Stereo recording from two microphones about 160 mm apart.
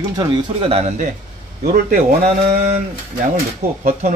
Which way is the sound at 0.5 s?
40° right (ahead or behind).